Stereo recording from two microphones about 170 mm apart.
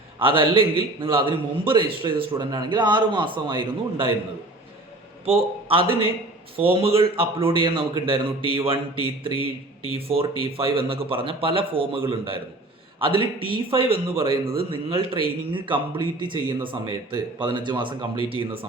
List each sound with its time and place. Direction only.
0.2 s speech: 30° right (ahead or behind)
5.2 s a man's voice: 35° right (ahead or behind)
10.1 s speech: 35° right (ahead or behind)